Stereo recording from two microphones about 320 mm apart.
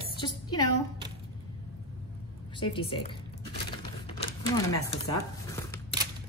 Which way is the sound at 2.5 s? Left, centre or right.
Centre.